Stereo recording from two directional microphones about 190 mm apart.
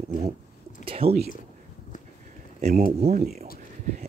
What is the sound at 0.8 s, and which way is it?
Whispering, 30° right (ahead or behind).